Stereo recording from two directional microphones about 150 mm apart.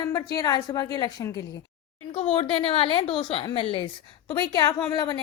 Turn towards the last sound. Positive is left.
turn(degrees=25)  # may be behind; listen again after turning